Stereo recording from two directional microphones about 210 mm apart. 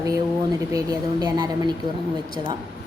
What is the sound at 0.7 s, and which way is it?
Speech, 20° right (ahead or behind).